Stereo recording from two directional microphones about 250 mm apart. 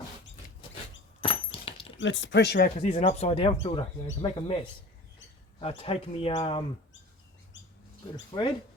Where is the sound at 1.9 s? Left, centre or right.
Left.